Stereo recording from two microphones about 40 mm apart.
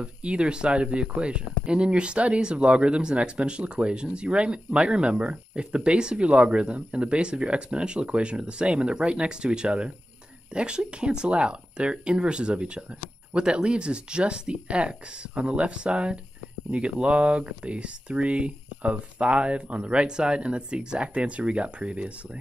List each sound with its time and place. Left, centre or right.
0.0 s speech: right